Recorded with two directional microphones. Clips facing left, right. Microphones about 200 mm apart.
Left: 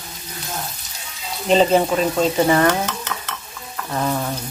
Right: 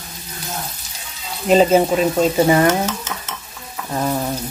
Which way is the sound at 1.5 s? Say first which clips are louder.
Right 2 dB; 5° right (ahead or behind).